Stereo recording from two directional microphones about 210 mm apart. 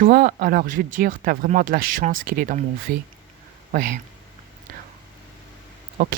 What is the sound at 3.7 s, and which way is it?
Speech, 40° right (ahead or behind).